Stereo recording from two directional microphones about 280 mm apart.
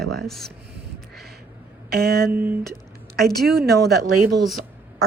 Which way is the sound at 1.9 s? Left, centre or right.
Right.